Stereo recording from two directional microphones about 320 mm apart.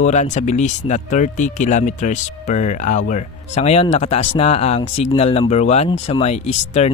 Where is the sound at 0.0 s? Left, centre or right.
Left.